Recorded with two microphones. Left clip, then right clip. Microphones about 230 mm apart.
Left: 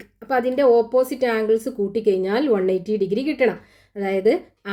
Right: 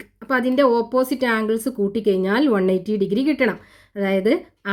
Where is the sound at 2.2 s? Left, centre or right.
Right.